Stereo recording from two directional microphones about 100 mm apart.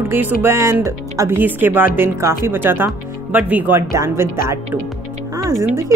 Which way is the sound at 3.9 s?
30° right (ahead or behind).